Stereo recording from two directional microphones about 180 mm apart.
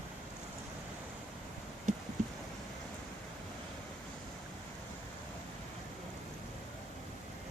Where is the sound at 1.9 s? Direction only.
45° right (ahead or behind).